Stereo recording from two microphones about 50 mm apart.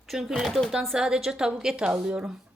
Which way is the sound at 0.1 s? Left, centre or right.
Centre.